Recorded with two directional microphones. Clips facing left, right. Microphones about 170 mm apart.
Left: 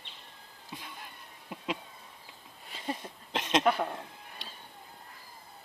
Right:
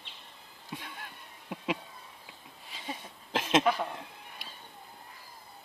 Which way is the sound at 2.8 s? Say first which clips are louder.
Left 5 dB; centre (ahead or behind).